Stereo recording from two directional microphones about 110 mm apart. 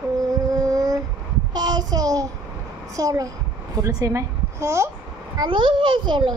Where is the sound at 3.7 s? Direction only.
30° right (ahead or behind).